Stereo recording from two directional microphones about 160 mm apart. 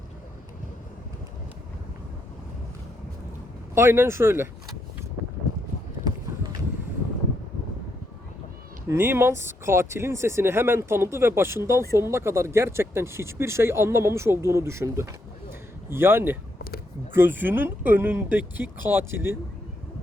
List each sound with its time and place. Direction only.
3.8 s speech: 15° right (ahead or behind)
8.9 s speech: 15° right (ahead or behind)
15.4 s a sound: 15° right (ahead or behind)
17.2 s speech: 10° right (ahead or behind)